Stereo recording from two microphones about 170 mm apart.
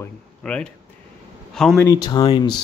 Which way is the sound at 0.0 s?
5° left (ahead or behind).